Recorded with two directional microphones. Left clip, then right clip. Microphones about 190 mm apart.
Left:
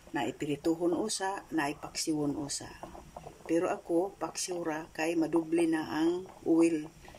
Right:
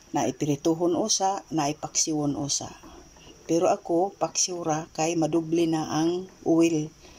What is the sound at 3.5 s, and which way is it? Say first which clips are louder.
Speech: right 8 dB; 20° right (ahead or behind).